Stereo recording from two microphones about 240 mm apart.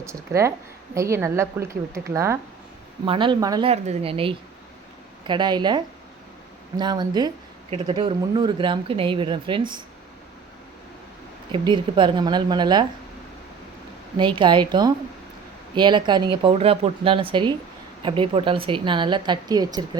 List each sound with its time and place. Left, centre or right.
0.0 s a woman's voice: centre
11.5 s a woman's voice: centre
14.2 s speech: centre